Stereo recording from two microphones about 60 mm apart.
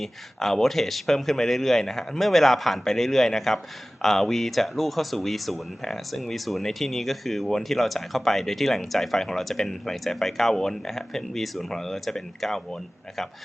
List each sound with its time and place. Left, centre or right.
0.0 s speech: centre